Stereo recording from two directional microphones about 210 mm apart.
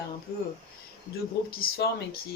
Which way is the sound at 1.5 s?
45° left (ahead or behind).